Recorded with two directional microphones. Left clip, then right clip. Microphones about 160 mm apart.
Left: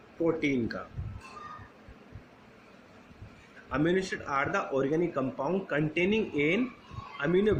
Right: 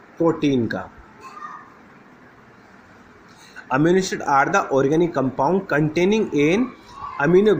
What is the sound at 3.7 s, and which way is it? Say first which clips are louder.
Speech: right 10 dB; 40° right (ahead or behind).